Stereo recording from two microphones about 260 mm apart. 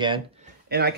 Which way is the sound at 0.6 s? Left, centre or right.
Right.